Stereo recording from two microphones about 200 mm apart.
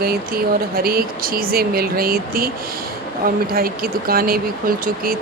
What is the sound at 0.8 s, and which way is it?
Speech, 50° right (ahead or behind).